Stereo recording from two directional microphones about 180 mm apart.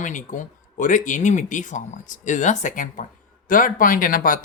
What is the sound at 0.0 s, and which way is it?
Speech, 45° left (ahead or behind).